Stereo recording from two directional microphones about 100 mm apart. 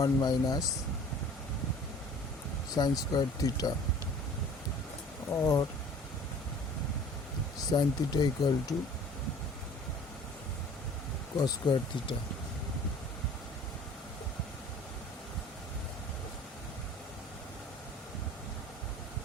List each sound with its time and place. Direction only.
0.0 s speech: 40° left (ahead or behind)
2.7 s speech: 40° left (ahead or behind)
5.3 s speech: 35° left (ahead or behind)
7.7 s speech: 45° left (ahead or behind)
11.6 s speech: 50° left (ahead or behind)